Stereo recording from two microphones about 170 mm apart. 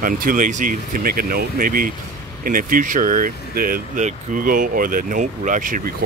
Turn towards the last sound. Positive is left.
turn(degrees=-50)  # may be behind; listen again after turning